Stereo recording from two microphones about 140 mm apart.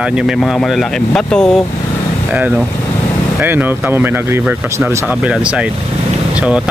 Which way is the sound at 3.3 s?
15° right (ahead or behind).